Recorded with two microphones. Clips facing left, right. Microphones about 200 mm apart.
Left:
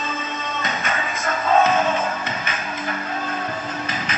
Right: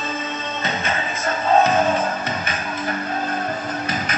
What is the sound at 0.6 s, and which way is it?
Music, 30° right (ahead or behind).